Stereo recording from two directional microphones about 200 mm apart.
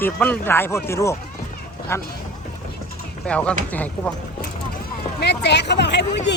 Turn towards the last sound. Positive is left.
turn(degrees=60)  # may be behind; listen again after turning